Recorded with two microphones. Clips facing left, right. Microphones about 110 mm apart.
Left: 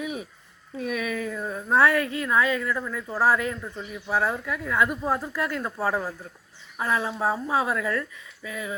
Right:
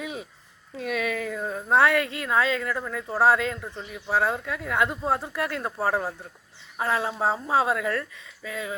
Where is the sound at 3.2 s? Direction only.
70° right (ahead or behind).